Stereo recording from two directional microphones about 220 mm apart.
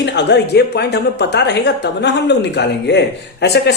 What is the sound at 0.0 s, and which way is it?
A woman's voice, 50° left (ahead or behind).